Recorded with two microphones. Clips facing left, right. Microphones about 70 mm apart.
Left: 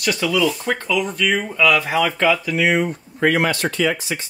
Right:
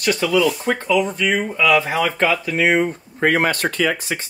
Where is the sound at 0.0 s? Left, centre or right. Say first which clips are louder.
Right 2 dB; right.